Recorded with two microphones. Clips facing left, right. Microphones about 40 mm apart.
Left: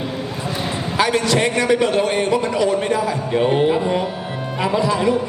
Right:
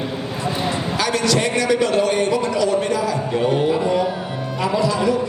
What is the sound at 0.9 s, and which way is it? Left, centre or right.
A man's voice, left.